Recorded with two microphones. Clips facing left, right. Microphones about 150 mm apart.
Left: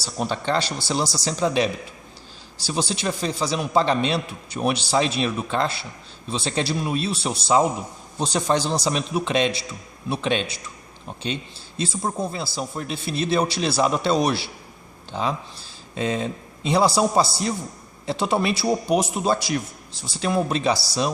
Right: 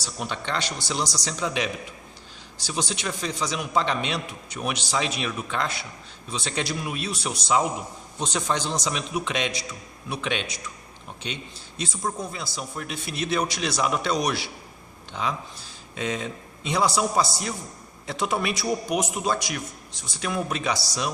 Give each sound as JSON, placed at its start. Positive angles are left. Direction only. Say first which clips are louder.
{"t": 0.0, "sound": "a man's voice", "louder": "left 6 dB", "side_deg": 35}
{"t": 11.8, "sound": "a man's voice", "louder": "left 4 dB", "side_deg": 30}